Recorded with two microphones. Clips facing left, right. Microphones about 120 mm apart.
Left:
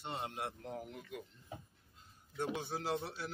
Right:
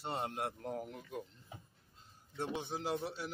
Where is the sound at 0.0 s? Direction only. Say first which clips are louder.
Right 3 dB; 40° right (ahead or behind).